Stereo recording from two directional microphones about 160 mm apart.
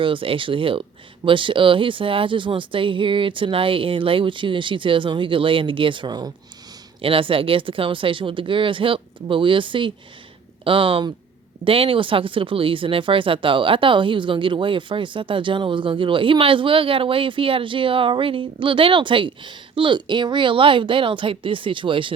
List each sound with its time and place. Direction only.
0.0 s speech: 35° right (ahead or behind)